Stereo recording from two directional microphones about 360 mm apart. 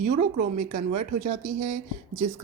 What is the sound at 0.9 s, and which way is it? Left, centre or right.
Speech, centre.